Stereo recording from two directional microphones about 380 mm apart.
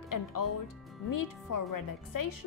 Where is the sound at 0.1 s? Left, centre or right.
Left.